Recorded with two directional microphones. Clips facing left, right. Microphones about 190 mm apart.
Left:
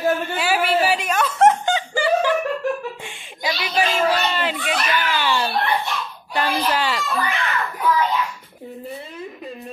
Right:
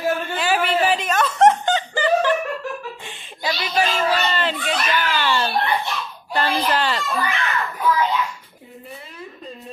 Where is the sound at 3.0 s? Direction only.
10° left (ahead or behind).